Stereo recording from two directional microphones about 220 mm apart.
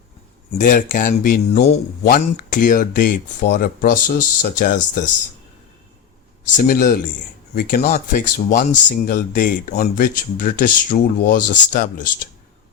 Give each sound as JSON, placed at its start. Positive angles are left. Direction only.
{"t": 0.6, "sound": "speech", "side_deg": 35}
{"t": 6.6, "sound": "speech", "side_deg": 40}